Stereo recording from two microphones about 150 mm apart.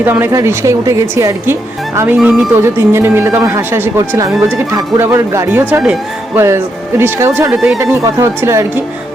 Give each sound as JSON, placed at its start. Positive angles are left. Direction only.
{"t": 0.0, "sound": "a woman's voice", "side_deg": -15}
{"t": 7.5, "sound": "speech", "side_deg": -5}
{"t": 7.8, "sound": "speech", "side_deg": -20}